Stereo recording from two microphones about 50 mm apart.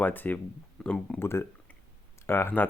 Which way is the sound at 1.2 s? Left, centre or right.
Left.